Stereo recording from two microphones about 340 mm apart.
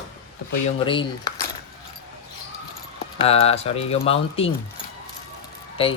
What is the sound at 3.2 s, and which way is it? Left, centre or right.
Speech, centre.